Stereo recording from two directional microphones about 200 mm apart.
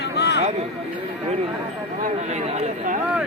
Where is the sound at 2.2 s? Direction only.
35° right (ahead or behind).